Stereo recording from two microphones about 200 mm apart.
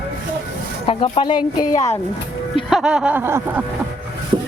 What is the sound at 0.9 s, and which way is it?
Speech, 25° left (ahead or behind).